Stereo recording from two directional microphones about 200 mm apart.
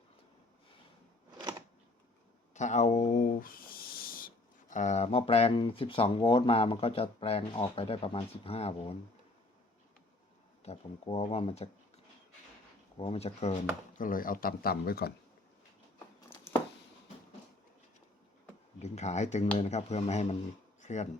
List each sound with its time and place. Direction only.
1.3 s a sound: 20° right (ahead or behind)
2.6 s a sound: 35° left (ahead or behind)
4.7 s speech: 35° left (ahead or behind)
10.6 s speech: 30° left (ahead or behind)
13.0 s speech: 30° left (ahead or behind)
14.0 s speech: 45° left (ahead or behind)
18.8 s speech: 35° left (ahead or behind)